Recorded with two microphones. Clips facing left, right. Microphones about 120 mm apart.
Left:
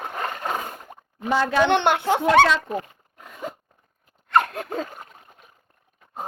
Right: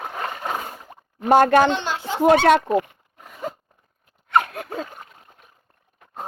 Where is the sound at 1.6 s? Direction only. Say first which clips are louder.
Left 3 dB; 60° left (ahead or behind).